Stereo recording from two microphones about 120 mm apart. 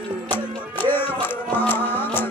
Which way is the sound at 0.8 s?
15° left (ahead or behind).